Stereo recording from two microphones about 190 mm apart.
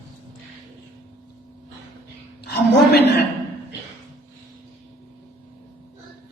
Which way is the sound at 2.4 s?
55° left (ahead or behind).